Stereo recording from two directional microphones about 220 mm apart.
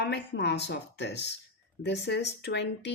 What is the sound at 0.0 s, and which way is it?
A woman's voice, 50° left (ahead or behind).